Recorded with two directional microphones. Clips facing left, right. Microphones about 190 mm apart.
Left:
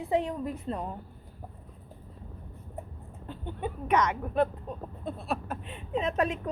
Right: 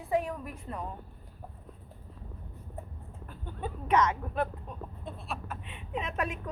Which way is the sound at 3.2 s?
25° left (ahead or behind).